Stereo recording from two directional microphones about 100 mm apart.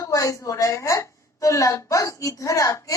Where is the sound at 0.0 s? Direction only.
35° left (ahead or behind).